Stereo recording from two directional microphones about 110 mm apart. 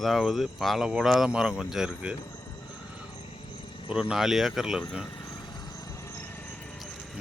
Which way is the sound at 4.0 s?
5° right (ahead or behind).